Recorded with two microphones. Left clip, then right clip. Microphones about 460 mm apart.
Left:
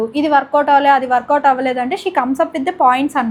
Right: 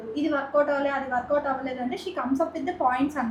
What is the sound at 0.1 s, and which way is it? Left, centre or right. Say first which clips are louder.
Speech: left 9 dB; left.